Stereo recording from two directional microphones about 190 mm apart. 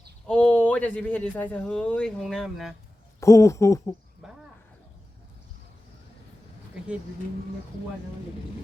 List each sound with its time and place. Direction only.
0.3 s speech: 5° left (ahead or behind)
3.2 s speech: 15° left (ahead or behind)
4.2 s a sound: centre (ahead or behind)